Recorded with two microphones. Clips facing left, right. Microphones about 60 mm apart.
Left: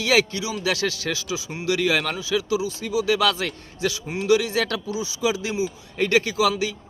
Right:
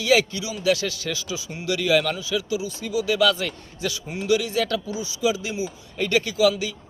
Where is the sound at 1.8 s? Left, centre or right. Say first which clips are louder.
Right 4 dB; left.